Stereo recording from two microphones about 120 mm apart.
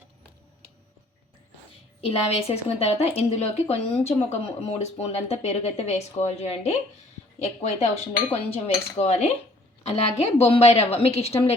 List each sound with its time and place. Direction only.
2.0 s a woman's voice: 55° left (ahead or behind)